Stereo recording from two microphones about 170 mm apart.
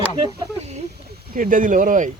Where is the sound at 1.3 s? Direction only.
50° right (ahead or behind).